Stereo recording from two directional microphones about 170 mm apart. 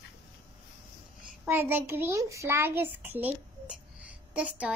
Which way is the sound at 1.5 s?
10° right (ahead or behind).